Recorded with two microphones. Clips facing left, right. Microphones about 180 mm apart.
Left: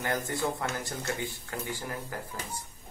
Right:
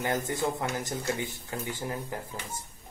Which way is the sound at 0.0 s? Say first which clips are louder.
Right 2 dB; 15° right (ahead or behind).